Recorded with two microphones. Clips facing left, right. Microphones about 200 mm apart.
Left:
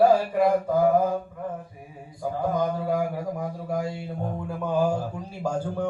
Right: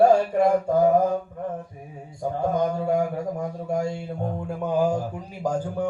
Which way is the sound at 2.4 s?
25° right (ahead or behind).